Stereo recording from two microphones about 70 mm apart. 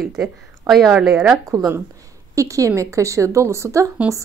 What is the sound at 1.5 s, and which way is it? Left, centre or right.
Speech, right.